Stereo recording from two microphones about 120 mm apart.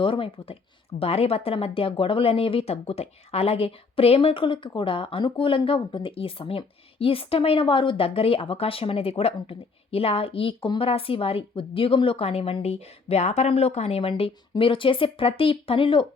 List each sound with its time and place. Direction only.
0.0 s speech: 50° left (ahead or behind)